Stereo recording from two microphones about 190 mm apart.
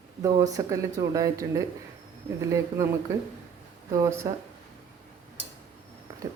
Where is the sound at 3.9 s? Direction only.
15° right (ahead or behind).